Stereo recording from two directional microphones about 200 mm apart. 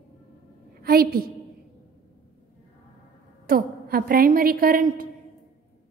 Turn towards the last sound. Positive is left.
turn(degrees=-45)  # may be behind; listen again after turning